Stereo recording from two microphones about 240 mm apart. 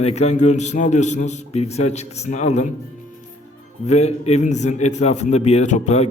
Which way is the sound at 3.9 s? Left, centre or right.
Left.